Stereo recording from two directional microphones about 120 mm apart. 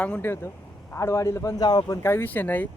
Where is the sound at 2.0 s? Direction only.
15° left (ahead or behind).